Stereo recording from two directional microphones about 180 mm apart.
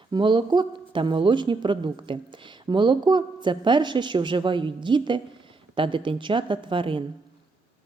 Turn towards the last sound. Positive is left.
turn(degrees=-30)  # may be behind; listen again after turning